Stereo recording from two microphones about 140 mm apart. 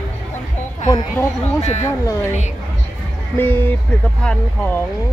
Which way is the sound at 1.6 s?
50° left (ahead or behind).